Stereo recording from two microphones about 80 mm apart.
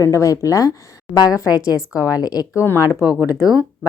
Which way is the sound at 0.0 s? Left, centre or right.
Left.